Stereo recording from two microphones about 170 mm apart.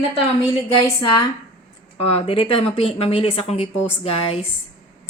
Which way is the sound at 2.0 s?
35° left (ahead or behind).